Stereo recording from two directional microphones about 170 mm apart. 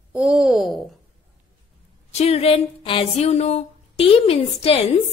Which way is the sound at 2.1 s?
40° left (ahead or behind).